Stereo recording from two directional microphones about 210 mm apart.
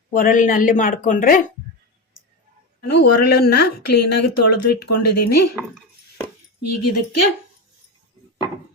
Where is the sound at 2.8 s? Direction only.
50° left (ahead or behind).